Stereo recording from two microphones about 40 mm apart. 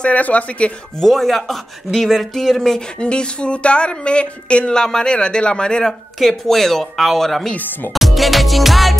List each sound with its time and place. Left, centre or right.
0.1 s speech: left
1.0 s speech: centre
3.0 s speech: left
4.7 s speech: centre
5.9 s speech: centre
7.9 s music: centre